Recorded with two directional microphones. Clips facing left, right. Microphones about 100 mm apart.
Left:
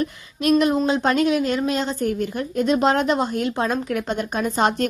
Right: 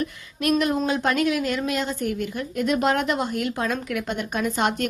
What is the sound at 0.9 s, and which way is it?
Speech, 25° left (ahead or behind).